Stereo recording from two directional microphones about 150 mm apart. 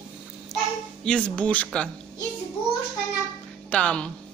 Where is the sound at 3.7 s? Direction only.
5° left (ahead or behind).